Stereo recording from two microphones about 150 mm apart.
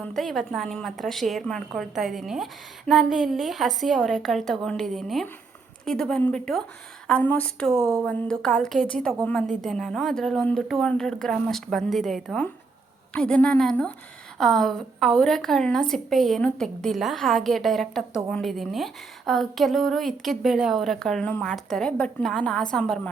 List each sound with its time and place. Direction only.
0.0 s a woman's voice: centre (ahead or behind)